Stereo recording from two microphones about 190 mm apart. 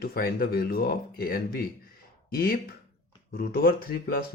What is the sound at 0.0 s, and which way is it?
Speech, 55° left (ahead or behind).